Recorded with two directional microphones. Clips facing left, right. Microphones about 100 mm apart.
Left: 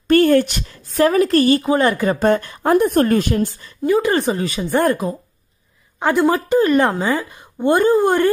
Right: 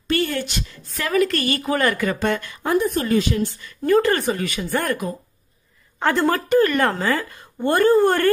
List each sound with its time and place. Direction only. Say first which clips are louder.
0.1 s a woman's voice: left 10 dB; 50° left (ahead or behind); by 1.6 s 35° left (ahead or behind)
1.6 s a woman's voice: left 4 dB; 25° left (ahead or behind); by 3.5 s 50° left (ahead or behind)
3.8 s speech: left 1 dB; 15° left (ahead or behind); by 5.1 s 30° left (ahead or behind)
5.9 s speech: left 3 dB; 15° left (ahead or behind)